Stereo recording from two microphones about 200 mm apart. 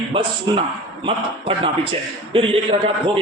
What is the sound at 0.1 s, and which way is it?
A man's voice, 25° right (ahead or behind).